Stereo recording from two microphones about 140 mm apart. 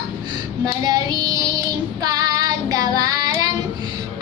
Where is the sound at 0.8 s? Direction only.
30° right (ahead or behind).